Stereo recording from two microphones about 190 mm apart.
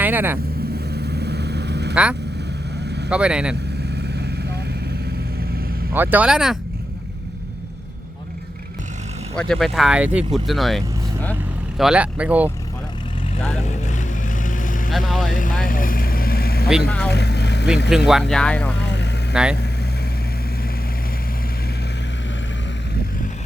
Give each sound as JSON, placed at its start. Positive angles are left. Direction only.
{"t": 0.0, "sound": "vehicle", "side_deg": -10}
{"t": 0.9, "sound": "vehicle", "side_deg": -60}
{"t": 3.1, "sound": "speech", "side_deg": -5}
{"t": 3.9, "sound": "vehicle", "side_deg": -60}
{"t": 5.9, "sound": "speech", "side_deg": -10}
{"t": 9.3, "sound": "speech", "side_deg": 5}
{"t": 11.8, "sound": "speech", "side_deg": -5}
{"t": 13.7, "sound": "vehicle", "side_deg": 40}
{"t": 14.8, "sound": "speech", "side_deg": 0}
{"t": 15.3, "sound": "speech", "side_deg": 45}
{"t": 15.6, "sound": "vehicle", "side_deg": 45}
{"t": 17.8, "sound": "speech", "side_deg": -5}
{"t": 18.8, "sound": "vehicle", "side_deg": 65}
{"t": 19.3, "sound": "speech", "side_deg": -5}